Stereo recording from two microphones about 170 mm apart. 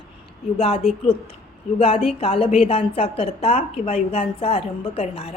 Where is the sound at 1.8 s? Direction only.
35° left (ahead or behind).